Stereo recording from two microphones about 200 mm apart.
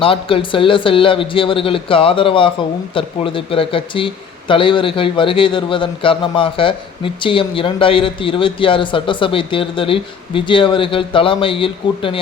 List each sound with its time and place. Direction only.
0.0 s speech: 25° left (ahead or behind)